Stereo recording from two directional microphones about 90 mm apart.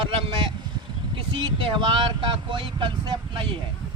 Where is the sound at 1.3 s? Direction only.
60° right (ahead or behind).